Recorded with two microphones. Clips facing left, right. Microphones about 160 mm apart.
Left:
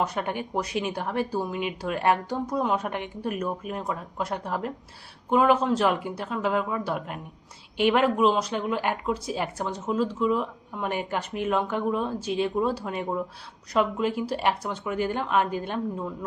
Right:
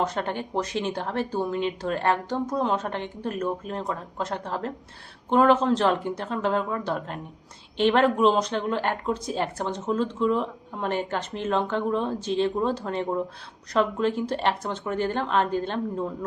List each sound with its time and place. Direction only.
0.0 s speech: 10° left (ahead or behind)